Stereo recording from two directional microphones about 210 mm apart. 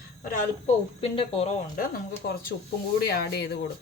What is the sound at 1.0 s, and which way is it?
Speech, 25° left (ahead or behind).